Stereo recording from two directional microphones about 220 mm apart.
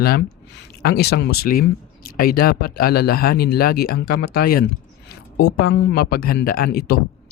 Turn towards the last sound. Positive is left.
turn(degrees=45)  # may be behind; listen again after turning